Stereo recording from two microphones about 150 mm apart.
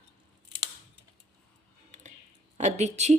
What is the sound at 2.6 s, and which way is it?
Speech, 50° right (ahead or behind).